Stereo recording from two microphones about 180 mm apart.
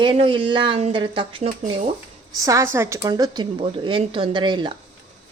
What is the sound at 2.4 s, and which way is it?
A woman's voice, 15° right (ahead or behind).